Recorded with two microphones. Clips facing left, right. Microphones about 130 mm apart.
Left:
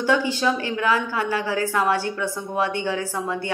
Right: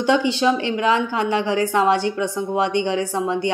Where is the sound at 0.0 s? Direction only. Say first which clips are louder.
Right 3 dB; 20° right (ahead or behind).